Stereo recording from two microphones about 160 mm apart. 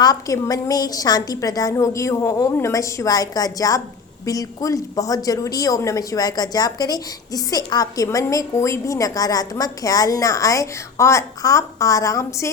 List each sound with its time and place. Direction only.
0.0 s a woman's voice: 20° left (ahead or behind)